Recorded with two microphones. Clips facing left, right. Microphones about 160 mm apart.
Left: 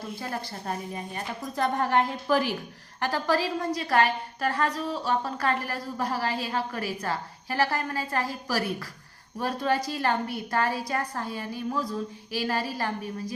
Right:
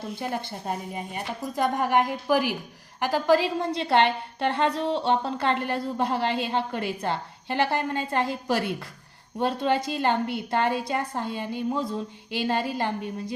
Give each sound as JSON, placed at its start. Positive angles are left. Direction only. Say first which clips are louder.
{"t": 0.2, "sound": "a woman's voice", "louder": "right 3 dB", "side_deg": -20}